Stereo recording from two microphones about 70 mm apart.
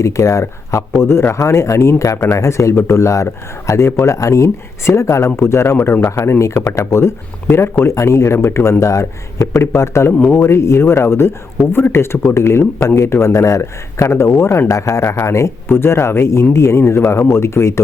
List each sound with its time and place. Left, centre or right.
0.0 s a man's voice: left
5.7 s a man's voice: left
6.1 s a man's voice: left
14.7 s a man's voice: left